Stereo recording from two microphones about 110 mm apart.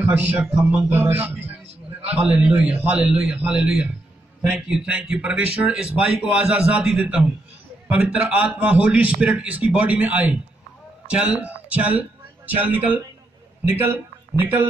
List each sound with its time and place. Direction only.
0.0 s a man's voice: 15° right (ahead or behind)